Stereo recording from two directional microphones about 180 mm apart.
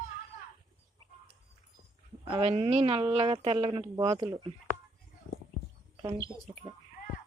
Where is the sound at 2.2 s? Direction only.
30° right (ahead or behind).